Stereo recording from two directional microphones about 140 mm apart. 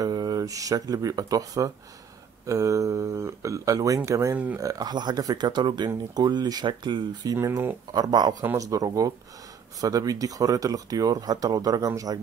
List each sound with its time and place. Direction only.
0.0 s speech: 30° right (ahead or behind)
7.3 s speech: 20° right (ahead or behind)